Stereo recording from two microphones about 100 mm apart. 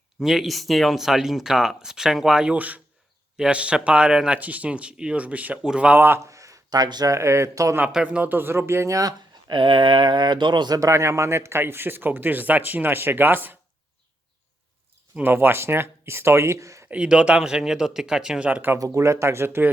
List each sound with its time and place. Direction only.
0.2 s speech: 5° right (ahead or behind); by 7.1 s 45° right (ahead or behind)
7.1 s speech: 30° right (ahead or behind)
7.9 s speech: 10° right (ahead or behind); by 9.1 s 35° right (ahead or behind)
9.5 s speech: 60° right (ahead or behind)
10.8 s speech: 30° right (ahead or behind)
15.1 s speech: 20° right (ahead or behind)
16.9 s speech: 10° right (ahead or behind)
18.8 s speech: 30° right (ahead or behind)